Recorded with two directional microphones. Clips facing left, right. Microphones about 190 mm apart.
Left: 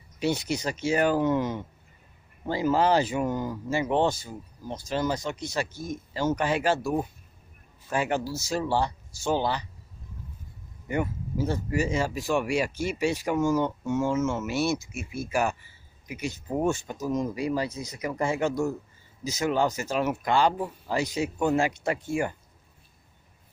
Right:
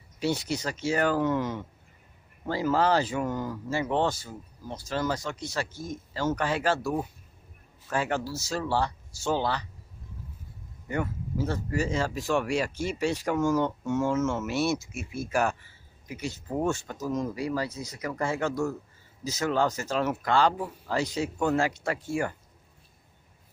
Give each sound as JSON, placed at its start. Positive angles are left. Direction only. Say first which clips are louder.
{"t": 0.2, "sound": "speech", "louder": "left 1 dB", "side_deg": 15}
{"t": 10.9, "sound": "speech", "louder": "left 2 dB", "side_deg": 15}